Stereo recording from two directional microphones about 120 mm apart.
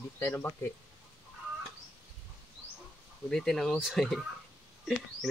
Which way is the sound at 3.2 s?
5° left (ahead or behind).